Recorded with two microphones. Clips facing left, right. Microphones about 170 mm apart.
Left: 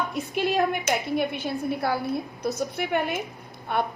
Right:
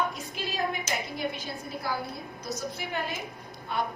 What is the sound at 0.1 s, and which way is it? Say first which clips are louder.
A woman's voice: left 10 dB; 65° left (ahead or behind).